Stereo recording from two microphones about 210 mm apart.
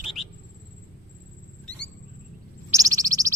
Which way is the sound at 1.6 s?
5° left (ahead or behind).